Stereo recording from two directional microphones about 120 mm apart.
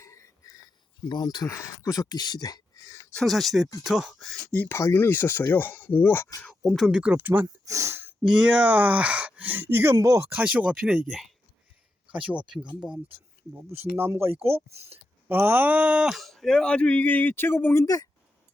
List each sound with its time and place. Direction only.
0.0 s a sound: 25° left (ahead or behind)
3.1 s speech: 5° left (ahead or behind)
4.5 s speech: 15° left (ahead or behind)
6.5 s speech: centre (ahead or behind)
7.4 s speech: 25° right (ahead or behind)
8.2 s speech: 5° right (ahead or behind); by 17.8 s 20° left (ahead or behind)
17.8 s speech: 30° left (ahead or behind)